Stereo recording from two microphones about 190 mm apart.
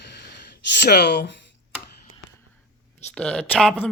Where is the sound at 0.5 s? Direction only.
60° left (ahead or behind).